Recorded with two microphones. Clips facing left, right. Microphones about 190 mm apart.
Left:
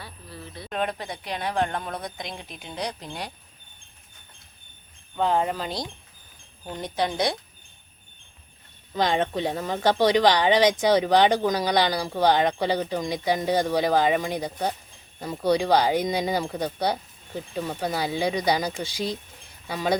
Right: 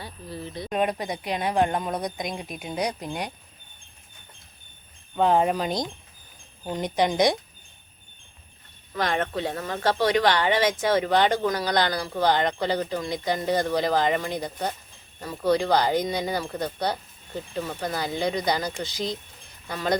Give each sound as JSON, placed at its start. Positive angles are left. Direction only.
{"t": 0.0, "sound": "speech", "side_deg": -20}
{"t": 5.1, "sound": "speech", "side_deg": -15}
{"t": 9.0, "sound": "speech", "side_deg": 20}